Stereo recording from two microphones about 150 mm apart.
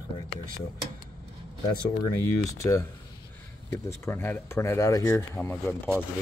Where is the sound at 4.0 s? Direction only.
15° left (ahead or behind).